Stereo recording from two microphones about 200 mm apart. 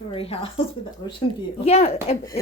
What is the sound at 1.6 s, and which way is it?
Speech, 30° left (ahead or behind).